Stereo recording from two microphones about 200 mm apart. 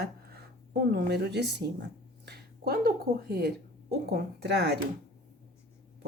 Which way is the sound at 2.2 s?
50° right (ahead or behind).